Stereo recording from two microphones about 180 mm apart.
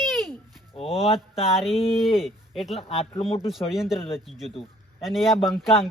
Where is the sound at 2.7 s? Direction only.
35° left (ahead or behind).